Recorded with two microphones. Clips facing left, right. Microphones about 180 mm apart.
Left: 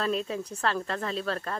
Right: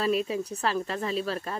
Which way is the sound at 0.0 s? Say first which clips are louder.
Right 3 dB; 10° right (ahead or behind).